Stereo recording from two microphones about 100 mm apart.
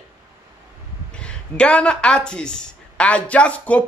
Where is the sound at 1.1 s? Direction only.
10° left (ahead or behind).